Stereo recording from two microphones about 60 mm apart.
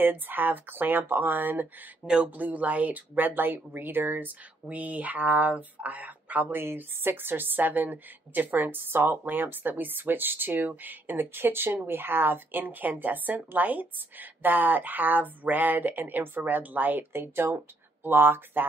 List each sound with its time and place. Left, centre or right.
0.0 s a woman's voice: right
6.5 s a woman's voice: right